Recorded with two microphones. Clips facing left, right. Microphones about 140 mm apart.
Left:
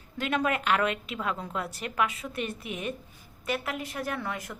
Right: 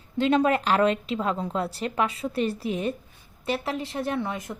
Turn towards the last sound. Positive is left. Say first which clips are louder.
# right 5 dB
turn(degrees=-20)  # may be behind; listen again after turning